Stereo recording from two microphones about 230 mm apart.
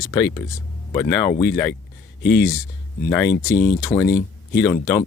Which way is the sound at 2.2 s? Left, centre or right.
Left.